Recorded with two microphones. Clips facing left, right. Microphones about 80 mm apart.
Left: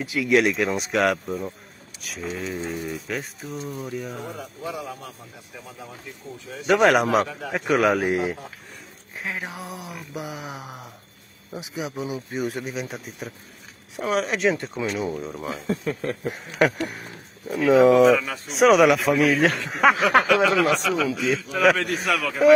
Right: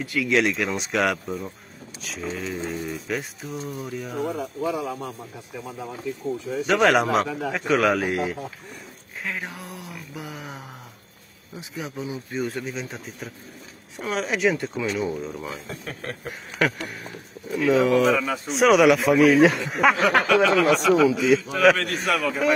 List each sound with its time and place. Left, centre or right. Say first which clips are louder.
0.0 s speech: left 2 dB; centre
2.9 s speech: right 1 dB; centre
6.7 s speech: left 2 dB; centre
9.4 s mantra: left 2 dB; centre
11.5 s speech: left 3 dB; centre
16.3 s mantra: left 3 dB; centre
18.0 s speech: left 3 dB; centre